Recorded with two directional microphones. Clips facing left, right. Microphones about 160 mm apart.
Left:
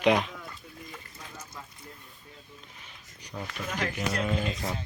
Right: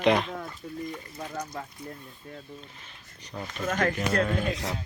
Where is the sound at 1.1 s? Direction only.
65° right (ahead or behind).